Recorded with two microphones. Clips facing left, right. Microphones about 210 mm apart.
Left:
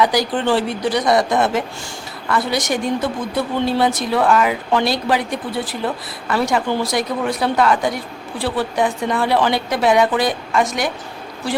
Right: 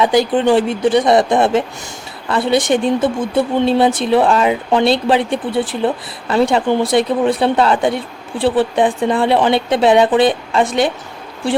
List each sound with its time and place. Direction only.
0.0 s speech: 25° right (ahead or behind)